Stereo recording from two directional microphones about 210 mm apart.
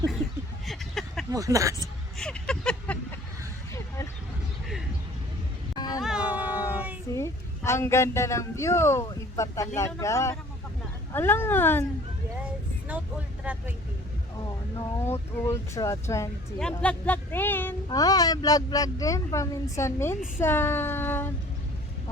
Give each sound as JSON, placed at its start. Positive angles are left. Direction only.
{"t": 0.6, "sound": "a sound", "side_deg": 0}
{"t": 1.3, "sound": "speech", "side_deg": -15}
{"t": 2.1, "sound": "a sound", "side_deg": 5}
{"t": 5.7, "sound": "cat", "side_deg": 20}
{"t": 6.0, "sound": "cat", "side_deg": -5}
{"t": 7.1, "sound": "a woman's voice", "side_deg": 15}
{"t": 12.9, "sound": "speech", "side_deg": -5}
{"t": 14.8, "sound": "speech", "side_deg": 10}